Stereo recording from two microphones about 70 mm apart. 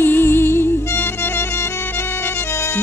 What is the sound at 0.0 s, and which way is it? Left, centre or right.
Music, left.